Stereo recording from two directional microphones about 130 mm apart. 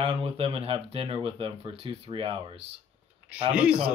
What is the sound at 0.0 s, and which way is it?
Speech, 45° right (ahead or behind).